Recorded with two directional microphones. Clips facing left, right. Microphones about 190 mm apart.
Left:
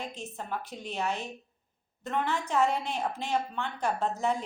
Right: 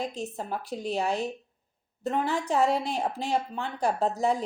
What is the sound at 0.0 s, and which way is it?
A woman's voice, 35° right (ahead or behind).